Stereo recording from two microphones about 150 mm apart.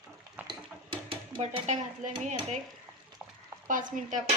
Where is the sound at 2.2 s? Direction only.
50° right (ahead or behind).